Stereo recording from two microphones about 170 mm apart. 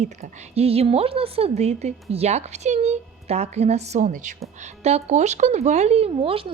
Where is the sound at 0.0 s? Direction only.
40° right (ahead or behind).